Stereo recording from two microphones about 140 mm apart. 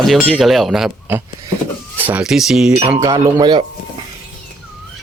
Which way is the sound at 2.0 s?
10° right (ahead or behind).